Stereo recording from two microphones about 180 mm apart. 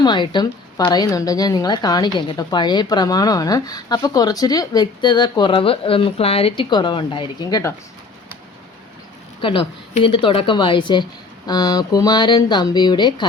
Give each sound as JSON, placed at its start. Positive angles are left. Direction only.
{"t": 0.0, "sound": "a woman's voice", "side_deg": 25}
{"t": 9.4, "sound": "a woman's voice", "side_deg": 30}